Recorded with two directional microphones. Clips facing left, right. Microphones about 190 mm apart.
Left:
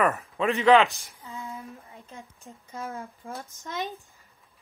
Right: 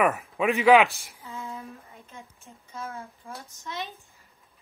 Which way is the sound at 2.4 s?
15° left (ahead or behind).